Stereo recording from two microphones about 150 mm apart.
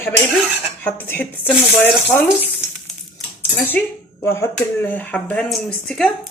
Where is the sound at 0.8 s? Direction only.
10° left (ahead or behind).